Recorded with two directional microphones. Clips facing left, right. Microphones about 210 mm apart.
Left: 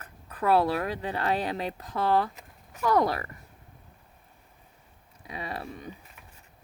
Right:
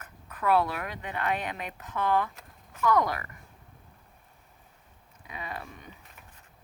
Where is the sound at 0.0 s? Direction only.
35° left (ahead or behind).